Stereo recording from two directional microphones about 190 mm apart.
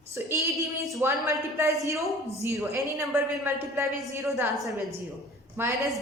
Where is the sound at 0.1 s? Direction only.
15° right (ahead or behind).